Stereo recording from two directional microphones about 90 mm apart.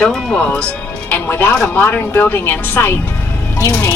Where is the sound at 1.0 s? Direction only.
20° left (ahead or behind).